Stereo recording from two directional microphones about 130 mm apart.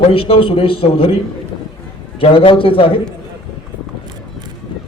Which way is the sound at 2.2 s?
40° left (ahead or behind).